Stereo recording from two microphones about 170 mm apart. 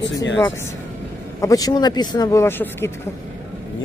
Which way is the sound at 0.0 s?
90° left.